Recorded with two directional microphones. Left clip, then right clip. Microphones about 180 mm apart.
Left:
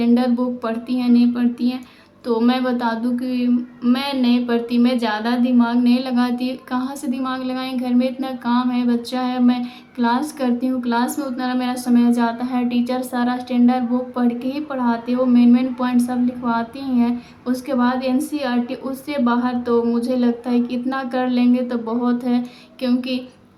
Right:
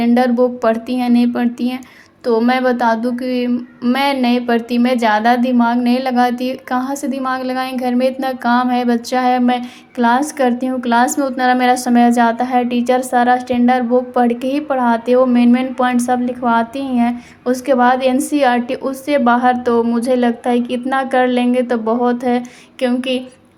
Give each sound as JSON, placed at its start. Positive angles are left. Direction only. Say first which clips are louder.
{"t": 0.0, "sound": "a woman's voice", "louder": "right 6 dB", "side_deg": -30}